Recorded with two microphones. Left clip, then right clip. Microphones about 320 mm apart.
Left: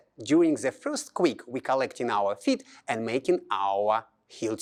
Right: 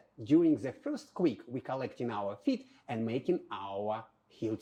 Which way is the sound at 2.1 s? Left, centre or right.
Centre.